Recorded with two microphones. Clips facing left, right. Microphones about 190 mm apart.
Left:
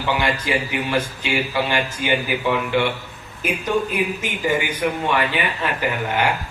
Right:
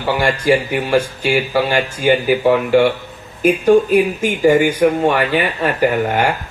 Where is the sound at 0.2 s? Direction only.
45° right (ahead or behind).